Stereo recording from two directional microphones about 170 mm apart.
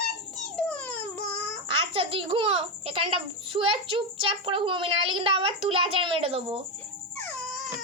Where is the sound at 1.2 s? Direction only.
35° right (ahead or behind).